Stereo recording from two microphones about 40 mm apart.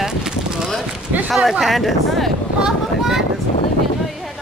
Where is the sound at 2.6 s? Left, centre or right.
Centre.